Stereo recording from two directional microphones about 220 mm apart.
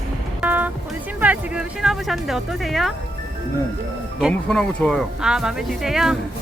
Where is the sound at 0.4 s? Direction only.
5° right (ahead or behind).